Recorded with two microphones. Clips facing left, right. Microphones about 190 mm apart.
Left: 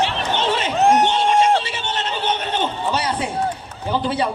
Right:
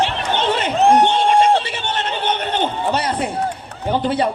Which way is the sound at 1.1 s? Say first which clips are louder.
Right 2 dB; 55° right (ahead or behind).